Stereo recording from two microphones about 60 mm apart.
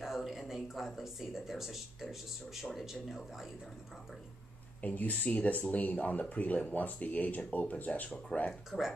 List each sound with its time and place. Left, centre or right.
0.0 s speech: centre
4.8 s speech: left
8.6 s speech: centre